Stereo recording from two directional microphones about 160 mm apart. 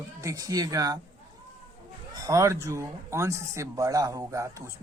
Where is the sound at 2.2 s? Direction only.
20° right (ahead or behind).